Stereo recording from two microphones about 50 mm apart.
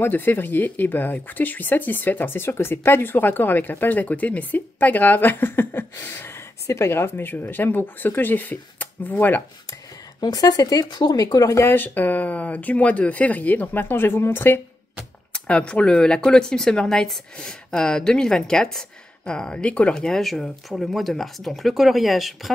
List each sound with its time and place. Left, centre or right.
0.0 s speech: left
6.9 s speech: left
11.6 s speech: left
15.3 s speech: left
19.9 s speech: centre